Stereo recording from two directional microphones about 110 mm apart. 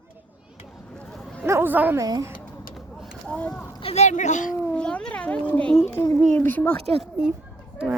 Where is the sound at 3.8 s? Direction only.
75° left (ahead or behind); by 4.4 s 90° left.